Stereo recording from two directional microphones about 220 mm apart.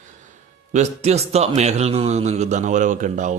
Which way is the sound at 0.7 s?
30° right (ahead or behind).